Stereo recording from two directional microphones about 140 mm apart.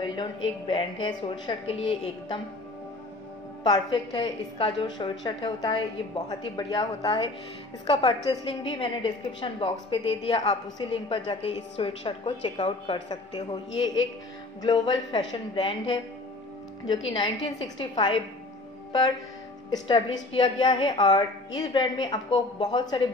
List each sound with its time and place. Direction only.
0.0 s a woman's voice: 35° left (ahead or behind)
3.6 s a woman's voice: 30° left (ahead or behind)
19.7 s a woman's voice: 30° left (ahead or behind)